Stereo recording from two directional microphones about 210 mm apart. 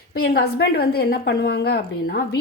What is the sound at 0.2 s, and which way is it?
A woman's voice, 50° left (ahead or behind).